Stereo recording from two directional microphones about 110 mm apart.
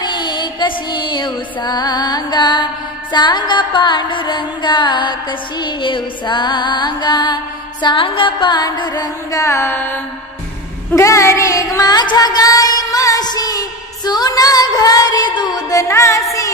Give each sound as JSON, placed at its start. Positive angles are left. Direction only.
{"t": 0.0, "sound": "music", "side_deg": 40}
{"t": 7.8, "sound": "music", "side_deg": 50}
{"t": 10.9, "sound": "a sound", "side_deg": 25}